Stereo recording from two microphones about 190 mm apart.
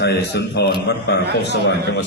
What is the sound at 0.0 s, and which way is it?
Speech, 60° left (ahead or behind).